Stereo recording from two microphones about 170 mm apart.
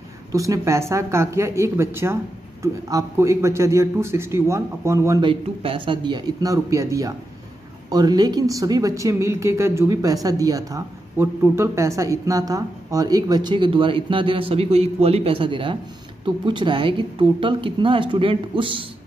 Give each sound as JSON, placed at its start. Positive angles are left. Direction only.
{"t": 0.3, "sound": "a man's voice", "side_deg": -20}
{"t": 5.3, "sound": "speech", "side_deg": -30}